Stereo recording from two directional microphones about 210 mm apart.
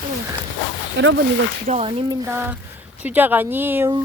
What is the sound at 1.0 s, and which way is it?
Speech, 60° right (ahead or behind).